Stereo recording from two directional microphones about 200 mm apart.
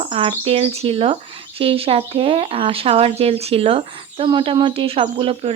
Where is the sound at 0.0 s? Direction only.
30° right (ahead or behind).